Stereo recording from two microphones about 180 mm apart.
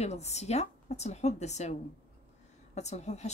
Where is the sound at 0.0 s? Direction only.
35° left (ahead or behind).